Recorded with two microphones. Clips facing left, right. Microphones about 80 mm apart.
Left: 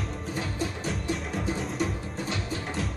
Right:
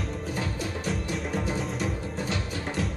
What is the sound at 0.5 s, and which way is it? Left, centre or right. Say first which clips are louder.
Music: even; left.